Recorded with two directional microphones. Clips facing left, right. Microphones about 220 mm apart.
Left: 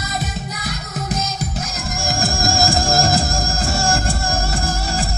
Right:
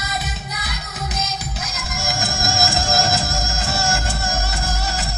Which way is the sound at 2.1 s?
35° left (ahead or behind).